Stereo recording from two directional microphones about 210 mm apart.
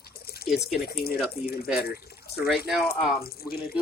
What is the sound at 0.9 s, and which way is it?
Speech, 50° left (ahead or behind).